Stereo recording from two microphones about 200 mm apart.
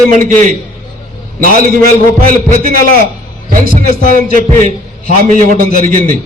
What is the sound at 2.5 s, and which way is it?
Music, 45° right (ahead or behind).